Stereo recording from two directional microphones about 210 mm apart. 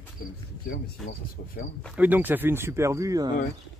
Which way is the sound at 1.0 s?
Centre (ahead or behind).